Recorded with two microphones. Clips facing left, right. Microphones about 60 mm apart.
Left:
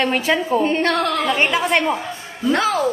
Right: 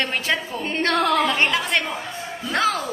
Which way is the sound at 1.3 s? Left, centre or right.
Centre.